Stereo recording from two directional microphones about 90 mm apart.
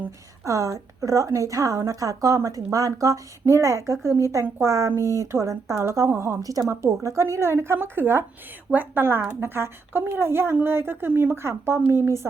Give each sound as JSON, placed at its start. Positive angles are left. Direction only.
{"t": 0.4, "sound": "speech", "side_deg": -35}